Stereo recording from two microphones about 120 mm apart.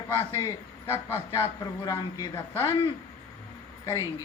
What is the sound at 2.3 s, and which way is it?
Speech, 20° left (ahead or behind).